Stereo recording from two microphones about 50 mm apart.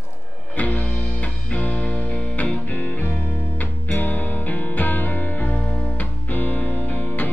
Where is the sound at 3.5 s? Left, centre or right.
Left.